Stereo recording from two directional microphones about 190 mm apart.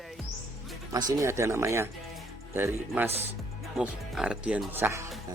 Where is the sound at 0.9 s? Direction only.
15° right (ahead or behind).